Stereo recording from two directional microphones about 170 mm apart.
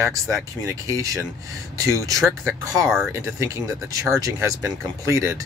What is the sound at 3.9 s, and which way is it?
Speech, 20° right (ahead or behind).